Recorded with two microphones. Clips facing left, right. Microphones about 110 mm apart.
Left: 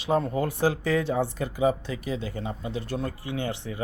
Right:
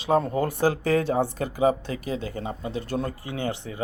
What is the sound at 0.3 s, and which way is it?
Speech, 45° right (ahead or behind).